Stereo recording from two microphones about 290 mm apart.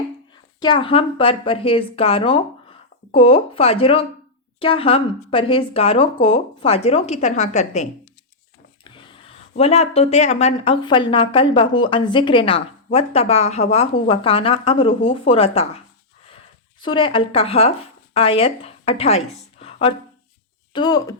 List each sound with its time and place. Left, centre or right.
0.6 s speech: centre
16.8 s speech: centre